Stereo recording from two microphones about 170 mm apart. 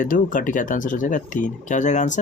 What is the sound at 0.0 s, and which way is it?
Speech, 50° left (ahead or behind).